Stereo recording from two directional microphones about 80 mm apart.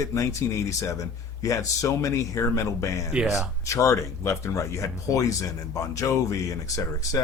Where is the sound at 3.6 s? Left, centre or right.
Left.